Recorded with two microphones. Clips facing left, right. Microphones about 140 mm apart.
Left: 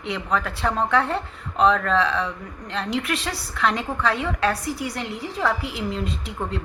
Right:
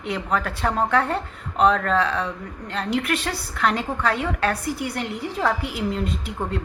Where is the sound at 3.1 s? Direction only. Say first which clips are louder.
Right 2 dB; 50° right (ahead or behind).